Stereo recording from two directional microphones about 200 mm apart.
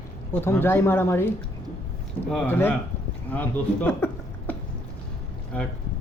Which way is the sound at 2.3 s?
10° left (ahead or behind).